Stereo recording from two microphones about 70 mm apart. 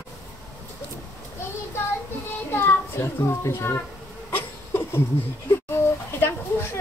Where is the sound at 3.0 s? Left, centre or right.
Left.